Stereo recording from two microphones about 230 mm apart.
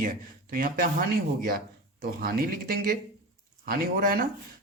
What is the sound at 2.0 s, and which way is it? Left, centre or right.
Speech, right.